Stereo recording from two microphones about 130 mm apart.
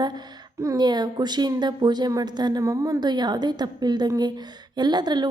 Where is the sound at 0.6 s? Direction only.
30° right (ahead or behind).